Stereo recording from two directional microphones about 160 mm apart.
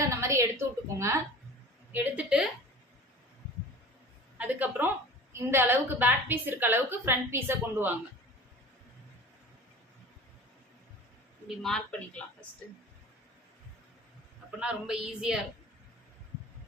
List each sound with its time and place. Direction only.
0.1 s a sound: 20° right (ahead or behind)
1.9 s a woman's voice: 10° right (ahead or behind)
4.4 s a woman's voice: 10° right (ahead or behind)
11.4 s a woman's voice: 5° left (ahead or behind)
14.6 s a woman's voice: 5° right (ahead or behind)